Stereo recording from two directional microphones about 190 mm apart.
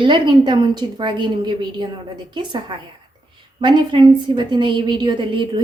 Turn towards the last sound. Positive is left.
turn(degrees=-25)  # may be behind; listen again after turning